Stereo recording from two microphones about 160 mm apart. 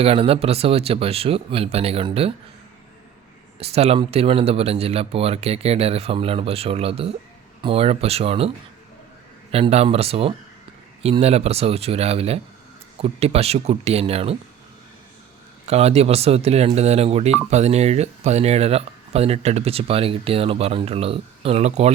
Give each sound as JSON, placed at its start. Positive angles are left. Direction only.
{"t": 0.0, "sound": "speech", "side_deg": -40}
{"t": 3.6, "sound": "speech", "side_deg": -40}
{"t": 9.5, "sound": "speech", "side_deg": -40}
{"t": 15.6, "sound": "speech", "side_deg": -40}